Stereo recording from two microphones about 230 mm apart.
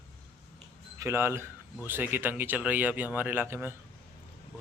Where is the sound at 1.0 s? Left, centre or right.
Centre.